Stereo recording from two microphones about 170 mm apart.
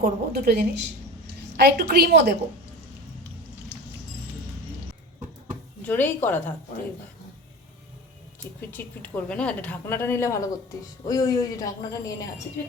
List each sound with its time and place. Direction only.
0.0 s a woman's voice: 70° right (ahead or behind)
5.8 s a woman's voice: 10° left (ahead or behind)
8.7 s a woman's voice: 10° left (ahead or behind)